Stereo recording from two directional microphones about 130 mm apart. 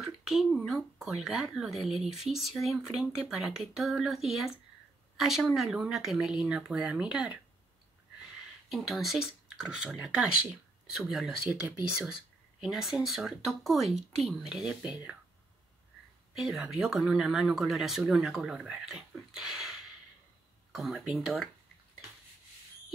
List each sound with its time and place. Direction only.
0.0 s speech: 5° right (ahead or behind)
8.6 s speech: centre (ahead or behind)
16.3 s speech: 5° right (ahead or behind)